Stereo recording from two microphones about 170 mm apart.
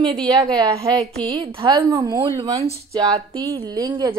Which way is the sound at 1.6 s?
30° right (ahead or behind).